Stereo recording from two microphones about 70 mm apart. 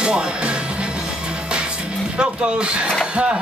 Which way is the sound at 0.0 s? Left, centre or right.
Centre.